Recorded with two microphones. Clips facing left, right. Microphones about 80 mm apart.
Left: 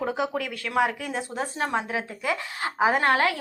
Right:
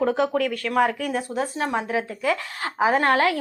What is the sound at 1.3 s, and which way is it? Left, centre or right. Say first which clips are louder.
Speech: even; left.